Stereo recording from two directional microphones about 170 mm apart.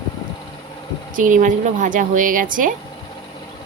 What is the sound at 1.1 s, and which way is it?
Speech, 50° right (ahead or behind).